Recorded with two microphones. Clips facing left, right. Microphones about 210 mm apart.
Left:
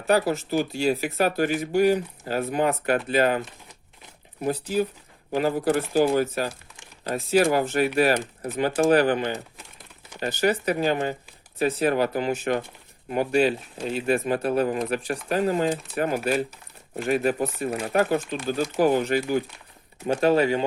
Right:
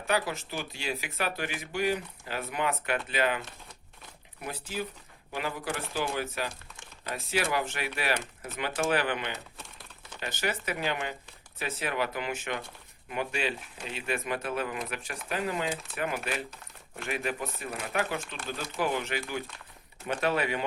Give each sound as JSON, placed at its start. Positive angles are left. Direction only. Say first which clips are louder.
{"t": 0.1, "sound": "speech", "louder": "left 9 dB", "side_deg": 40}